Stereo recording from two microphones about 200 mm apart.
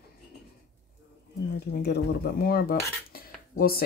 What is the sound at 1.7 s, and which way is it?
Cutlery, 55° left (ahead or behind).